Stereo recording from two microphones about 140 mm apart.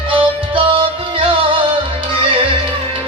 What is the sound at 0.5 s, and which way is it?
Music, 40° right (ahead or behind).